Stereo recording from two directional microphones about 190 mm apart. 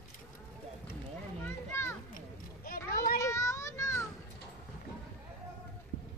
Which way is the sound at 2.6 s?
50° left (ahead or behind).